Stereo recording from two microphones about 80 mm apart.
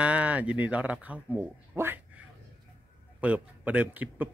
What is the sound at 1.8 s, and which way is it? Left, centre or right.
Speech, right.